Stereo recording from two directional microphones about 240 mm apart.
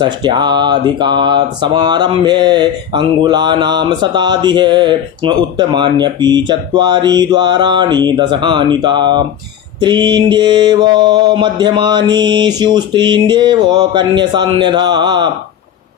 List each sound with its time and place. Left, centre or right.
0.0 s speech: centre